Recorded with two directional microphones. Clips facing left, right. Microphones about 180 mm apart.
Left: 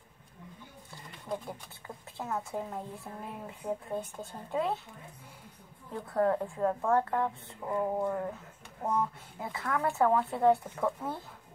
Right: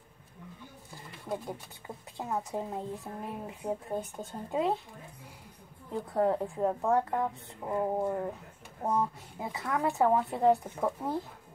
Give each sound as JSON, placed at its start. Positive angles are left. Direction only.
{"t": 2.1, "sound": "speech", "side_deg": -15}
{"t": 5.9, "sound": "speech", "side_deg": -15}